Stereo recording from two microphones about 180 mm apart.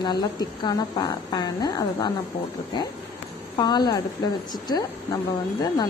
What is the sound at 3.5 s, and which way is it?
A woman's voice, 25° left (ahead or behind).